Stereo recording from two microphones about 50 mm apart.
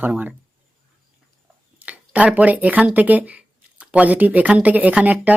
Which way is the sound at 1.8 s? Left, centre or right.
Right.